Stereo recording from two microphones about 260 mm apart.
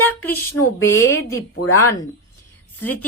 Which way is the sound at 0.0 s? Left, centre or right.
Centre.